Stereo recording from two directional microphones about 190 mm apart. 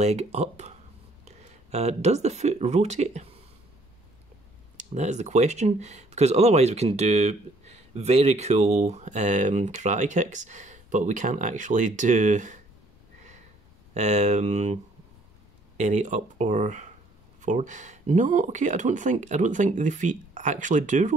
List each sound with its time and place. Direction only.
0.0 s speech: 35° right (ahead or behind)
4.7 s speech: 40° right (ahead or behind)
13.9 s speech: 35° right (ahead or behind)
15.8 s speech: 40° right (ahead or behind)